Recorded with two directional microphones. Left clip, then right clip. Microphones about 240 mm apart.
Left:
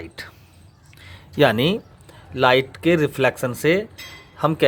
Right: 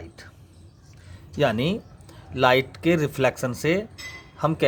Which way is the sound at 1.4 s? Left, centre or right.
Centre.